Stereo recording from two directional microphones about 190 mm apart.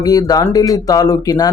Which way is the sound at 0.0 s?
20° left (ahead or behind).